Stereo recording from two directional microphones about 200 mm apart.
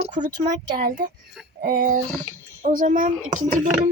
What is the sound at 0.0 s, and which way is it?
A child's voice, 35° right (ahead or behind).